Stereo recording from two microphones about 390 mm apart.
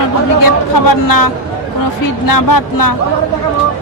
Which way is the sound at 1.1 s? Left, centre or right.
Left.